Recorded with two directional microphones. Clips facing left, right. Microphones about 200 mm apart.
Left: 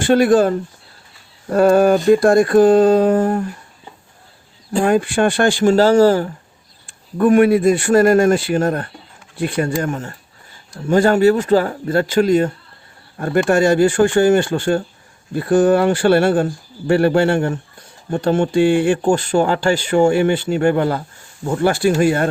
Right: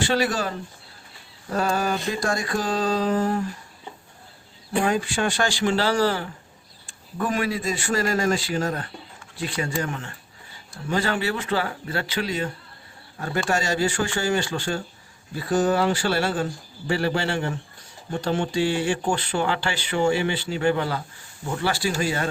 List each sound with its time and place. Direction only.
0.0 s speech: 50° left (ahead or behind)
4.8 s speech: 55° left (ahead or behind)
6.8 s speech: 55° left (ahead or behind)